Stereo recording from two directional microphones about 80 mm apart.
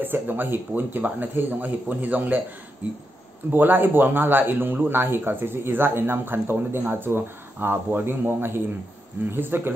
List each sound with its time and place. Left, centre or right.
0.0 s speech: right